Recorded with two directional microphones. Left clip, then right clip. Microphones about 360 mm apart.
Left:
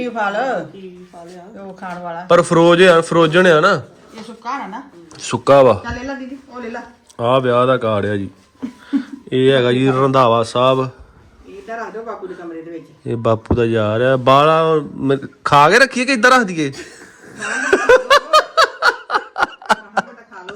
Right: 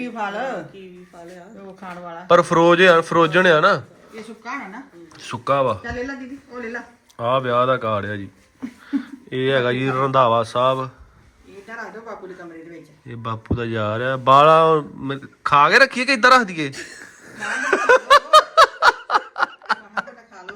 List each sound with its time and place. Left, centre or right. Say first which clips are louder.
2.2 s a man's voice: left 3 dB; centre
5.1 s speech: left 9 dB; centre
7.2 s a man's voice: left 5 dB; centre
13.1 s a man's voice: left 11 dB; centre
17.4 s snicker: left 4 dB; centre